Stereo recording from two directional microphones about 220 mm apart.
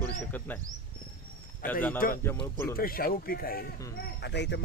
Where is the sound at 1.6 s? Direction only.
10° left (ahead or behind).